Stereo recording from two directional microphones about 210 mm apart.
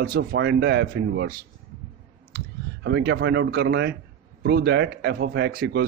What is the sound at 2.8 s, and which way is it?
A man's voice, 55° right (ahead or behind).